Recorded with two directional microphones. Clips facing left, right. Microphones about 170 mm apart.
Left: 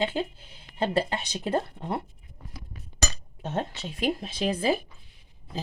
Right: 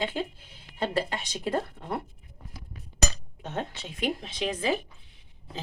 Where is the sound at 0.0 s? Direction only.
30° left (ahead or behind).